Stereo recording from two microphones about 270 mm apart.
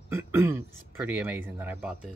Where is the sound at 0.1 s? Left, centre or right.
Centre.